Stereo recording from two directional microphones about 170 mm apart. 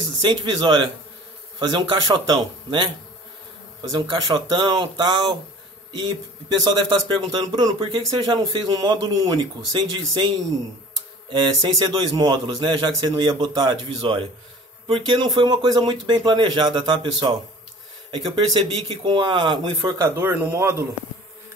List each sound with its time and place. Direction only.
0.2 s speech: 30° right (ahead or behind)
3.9 s speech: 25° right (ahead or behind)
6.6 s speech: 25° right (ahead or behind)
11.3 s speech: 25° right (ahead or behind)
18.1 s speech: 25° right (ahead or behind)